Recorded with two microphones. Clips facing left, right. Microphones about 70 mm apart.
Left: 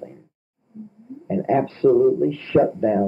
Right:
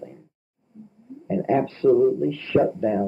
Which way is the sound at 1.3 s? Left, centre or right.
Left.